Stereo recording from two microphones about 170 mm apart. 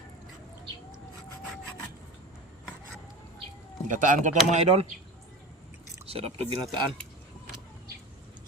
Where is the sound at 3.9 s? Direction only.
50° right (ahead or behind).